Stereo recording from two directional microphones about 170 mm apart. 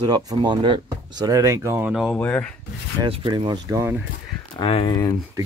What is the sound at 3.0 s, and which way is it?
Speech, 25° right (ahead or behind).